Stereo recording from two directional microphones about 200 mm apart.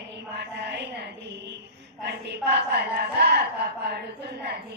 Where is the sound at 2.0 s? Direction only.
55° right (ahead or behind).